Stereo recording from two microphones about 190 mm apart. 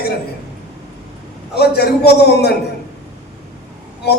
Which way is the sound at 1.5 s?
60° left (ahead or behind).